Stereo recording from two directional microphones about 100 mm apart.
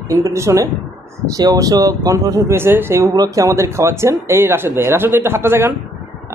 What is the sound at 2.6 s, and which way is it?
Speech, 25° right (ahead or behind).